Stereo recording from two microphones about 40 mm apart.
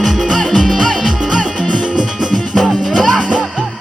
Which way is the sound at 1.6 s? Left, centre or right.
Left.